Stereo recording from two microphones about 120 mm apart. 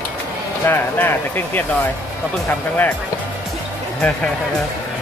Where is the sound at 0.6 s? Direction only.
15° left (ahead or behind).